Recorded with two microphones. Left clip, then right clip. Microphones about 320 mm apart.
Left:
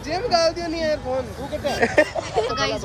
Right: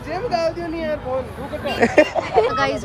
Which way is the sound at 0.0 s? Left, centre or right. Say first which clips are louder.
Left 1 dB; left.